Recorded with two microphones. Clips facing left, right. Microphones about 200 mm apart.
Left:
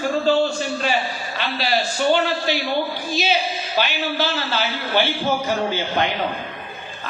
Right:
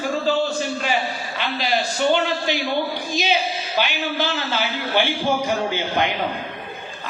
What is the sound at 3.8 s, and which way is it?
A man's voice, 15° right (ahead or behind).